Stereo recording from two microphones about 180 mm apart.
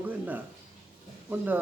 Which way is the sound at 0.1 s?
10° right (ahead or behind).